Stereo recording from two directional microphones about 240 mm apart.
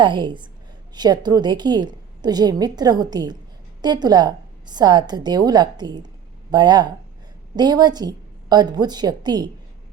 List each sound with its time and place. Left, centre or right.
0.0 s a woman's voice: centre